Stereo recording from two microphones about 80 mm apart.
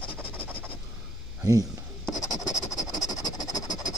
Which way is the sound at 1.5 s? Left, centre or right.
Right.